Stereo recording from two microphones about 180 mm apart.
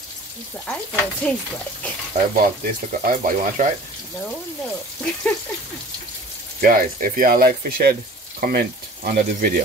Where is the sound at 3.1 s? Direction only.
50° right (ahead or behind).